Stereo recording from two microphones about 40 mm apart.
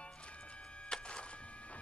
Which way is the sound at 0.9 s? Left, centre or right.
Left.